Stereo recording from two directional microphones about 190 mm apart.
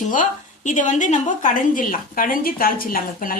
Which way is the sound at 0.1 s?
40° left (ahead or behind).